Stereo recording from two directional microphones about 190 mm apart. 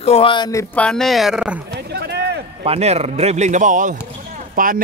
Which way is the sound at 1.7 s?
60° right (ahead or behind).